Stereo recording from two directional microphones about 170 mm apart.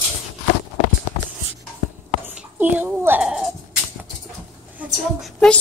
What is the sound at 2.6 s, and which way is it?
Speech, 10° right (ahead or behind).